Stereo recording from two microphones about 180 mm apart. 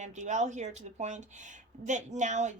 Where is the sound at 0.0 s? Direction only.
40° right (ahead or behind).